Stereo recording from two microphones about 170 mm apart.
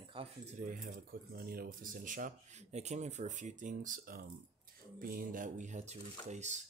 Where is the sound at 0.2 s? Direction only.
30° right (ahead or behind).